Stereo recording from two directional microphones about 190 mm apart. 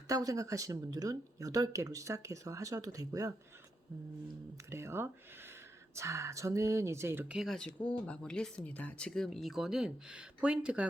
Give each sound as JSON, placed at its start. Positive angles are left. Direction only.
{"t": 0.1, "sound": "speech", "side_deg": -20}
{"t": 4.7, "sound": "speech", "side_deg": -15}